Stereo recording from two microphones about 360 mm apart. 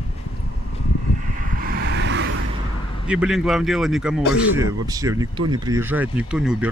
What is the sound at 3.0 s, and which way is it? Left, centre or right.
A man's voice, centre.